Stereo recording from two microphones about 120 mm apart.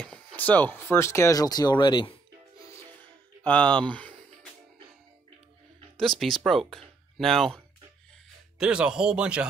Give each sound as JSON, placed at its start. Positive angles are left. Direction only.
{"t": 0.0, "sound": "speech", "side_deg": 10}
{"t": 3.4, "sound": "speech", "side_deg": 10}
{"t": 5.9, "sound": "speech", "side_deg": 0}
{"t": 8.5, "sound": "speech", "side_deg": -10}